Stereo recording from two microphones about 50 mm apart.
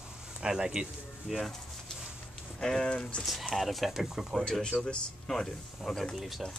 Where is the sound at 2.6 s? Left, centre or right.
Centre.